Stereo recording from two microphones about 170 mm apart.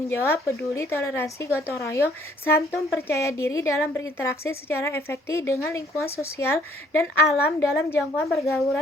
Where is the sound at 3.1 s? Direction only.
15° left (ahead or behind).